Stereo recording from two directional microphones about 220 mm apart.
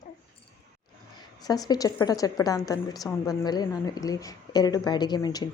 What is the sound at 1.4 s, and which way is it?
A woman's voice, 15° left (ahead or behind).